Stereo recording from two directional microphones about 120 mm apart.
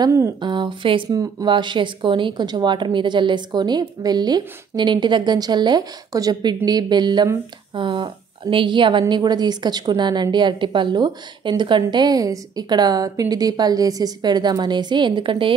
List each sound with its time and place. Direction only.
0.0 s speech: 25° right (ahead or behind)
0.4 s a woman's voice: 40° right (ahead or behind)